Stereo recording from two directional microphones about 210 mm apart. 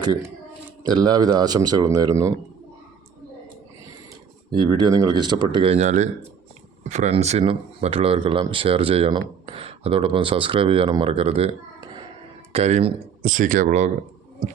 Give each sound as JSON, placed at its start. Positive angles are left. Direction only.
{"t": 0.9, "sound": "speech", "side_deg": -20}
{"t": 4.5, "sound": "speech", "side_deg": -20}
{"t": 12.5, "sound": "speech", "side_deg": -30}